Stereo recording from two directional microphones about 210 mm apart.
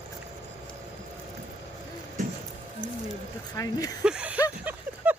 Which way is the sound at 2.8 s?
20° left (ahead or behind).